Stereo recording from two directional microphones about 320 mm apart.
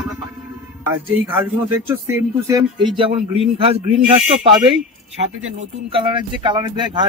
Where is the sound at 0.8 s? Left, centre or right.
Centre.